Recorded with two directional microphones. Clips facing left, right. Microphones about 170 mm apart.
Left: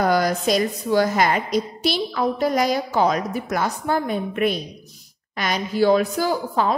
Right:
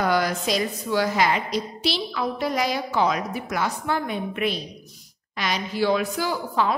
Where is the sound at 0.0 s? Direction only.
40° left (ahead or behind).